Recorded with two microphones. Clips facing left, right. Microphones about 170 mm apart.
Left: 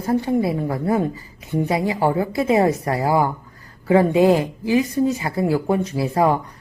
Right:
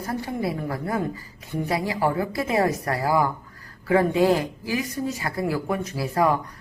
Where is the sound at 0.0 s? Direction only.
25° left (ahead or behind).